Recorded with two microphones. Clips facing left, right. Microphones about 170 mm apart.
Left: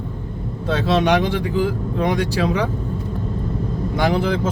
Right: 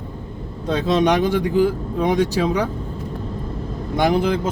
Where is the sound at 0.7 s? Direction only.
20° right (ahead or behind).